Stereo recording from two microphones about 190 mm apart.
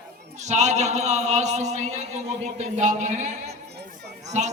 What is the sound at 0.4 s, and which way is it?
Chant, 35° right (ahead or behind).